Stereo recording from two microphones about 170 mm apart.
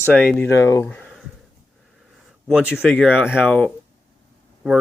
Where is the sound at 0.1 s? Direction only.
10° left (ahead or behind).